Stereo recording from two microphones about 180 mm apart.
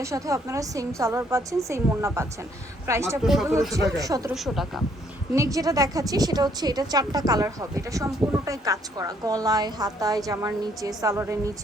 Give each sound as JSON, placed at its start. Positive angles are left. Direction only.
{"t": 0.0, "sound": "a woman's voice", "side_deg": -15}
{"t": 4.4, "sound": "a woman's voice", "side_deg": 0}
{"t": 5.3, "sound": "a woman's voice", "side_deg": -15}